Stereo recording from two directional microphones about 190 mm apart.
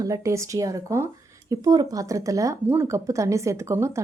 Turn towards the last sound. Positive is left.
turn(degrees=-15)  # may be behind; listen again after turning